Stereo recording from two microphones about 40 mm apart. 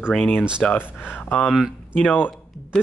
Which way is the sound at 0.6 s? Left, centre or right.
Centre.